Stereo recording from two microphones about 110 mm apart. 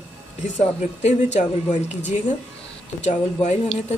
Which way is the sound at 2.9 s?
90° left.